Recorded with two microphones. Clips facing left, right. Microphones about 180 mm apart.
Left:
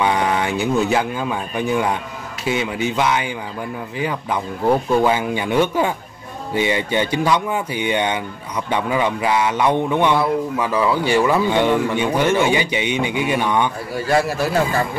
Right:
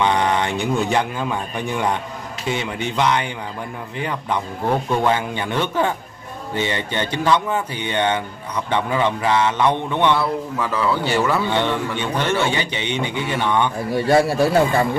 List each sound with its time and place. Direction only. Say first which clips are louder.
0.0 s speech: even; 5° left (ahead or behind)
14.0 s speech: right 2 dB; 35° right (ahead or behind)